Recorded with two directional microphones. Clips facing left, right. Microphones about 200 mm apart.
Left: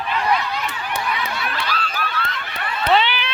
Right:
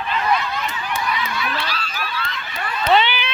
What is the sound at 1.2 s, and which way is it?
Honk, 55° left (ahead or behind).